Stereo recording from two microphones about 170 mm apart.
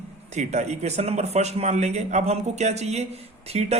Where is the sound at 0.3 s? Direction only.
40° right (ahead or behind).